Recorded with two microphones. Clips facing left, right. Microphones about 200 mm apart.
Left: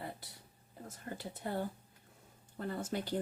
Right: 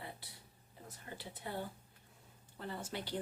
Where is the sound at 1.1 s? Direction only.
45° left (ahead or behind).